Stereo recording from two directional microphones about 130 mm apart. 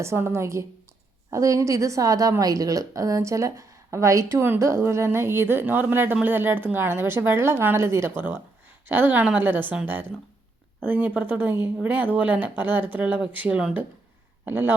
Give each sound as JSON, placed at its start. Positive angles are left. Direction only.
{"t": 0.0, "sound": "a woman's voice", "side_deg": -20}